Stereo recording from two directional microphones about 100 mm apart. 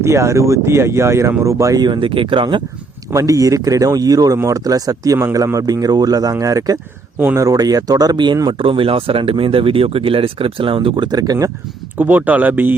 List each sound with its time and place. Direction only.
0.0 s speech: 30° right (ahead or behind); by 2.6 s 55° right (ahead or behind)
3.1 s speech: 35° right (ahead or behind); by 8.4 s 50° right (ahead or behind)
8.4 s speech: 60° right (ahead or behind); by 11.5 s 35° right (ahead or behind)
11.9 s speech: 20° right (ahead or behind)